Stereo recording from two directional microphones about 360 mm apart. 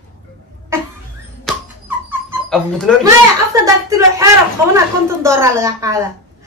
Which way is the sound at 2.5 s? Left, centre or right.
Centre.